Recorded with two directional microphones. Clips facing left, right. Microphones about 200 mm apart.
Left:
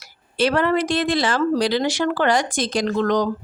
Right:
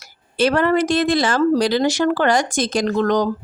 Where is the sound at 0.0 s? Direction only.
45° right (ahead or behind).